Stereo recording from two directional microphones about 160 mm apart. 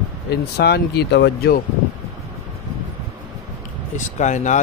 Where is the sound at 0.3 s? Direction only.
90° left.